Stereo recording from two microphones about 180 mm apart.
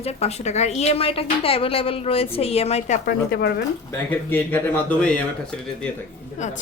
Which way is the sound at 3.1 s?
60° left (ahead or behind).